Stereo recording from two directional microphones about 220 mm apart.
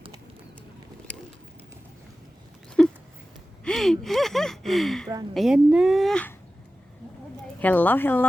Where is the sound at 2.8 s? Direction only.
5° left (ahead or behind).